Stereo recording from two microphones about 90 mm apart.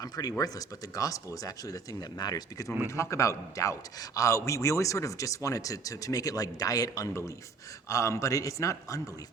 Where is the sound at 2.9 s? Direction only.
30° left (ahead or behind).